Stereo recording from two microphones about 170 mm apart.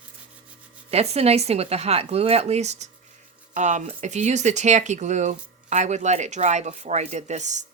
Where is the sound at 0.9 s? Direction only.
40° right (ahead or behind).